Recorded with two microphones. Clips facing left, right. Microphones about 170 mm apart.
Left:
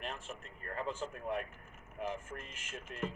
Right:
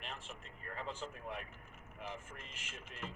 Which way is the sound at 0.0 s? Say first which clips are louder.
Left 6 dB; 45° left (ahead or behind).